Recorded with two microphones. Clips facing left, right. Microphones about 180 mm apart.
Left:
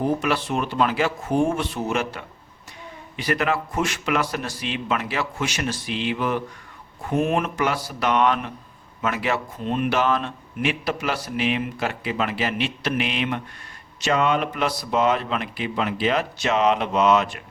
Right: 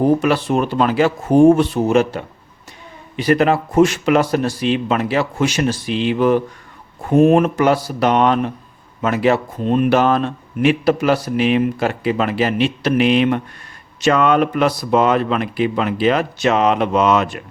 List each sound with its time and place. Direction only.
0.0 s speech: 35° right (ahead or behind)
14.0 s speech: 55° right (ahead or behind)